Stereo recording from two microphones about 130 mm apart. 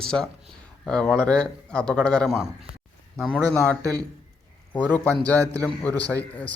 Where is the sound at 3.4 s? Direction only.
10° left (ahead or behind).